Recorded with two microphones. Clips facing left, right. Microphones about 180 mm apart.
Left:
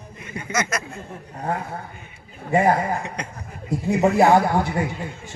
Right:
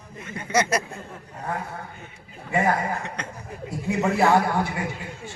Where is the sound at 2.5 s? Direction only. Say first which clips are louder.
Left 5 dB; 35° left (ahead or behind).